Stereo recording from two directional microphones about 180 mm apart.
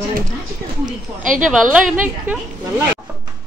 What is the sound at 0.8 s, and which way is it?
Speech, 45° right (ahead or behind).